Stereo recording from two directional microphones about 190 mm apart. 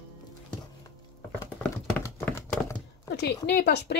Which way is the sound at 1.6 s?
15° left (ahead or behind).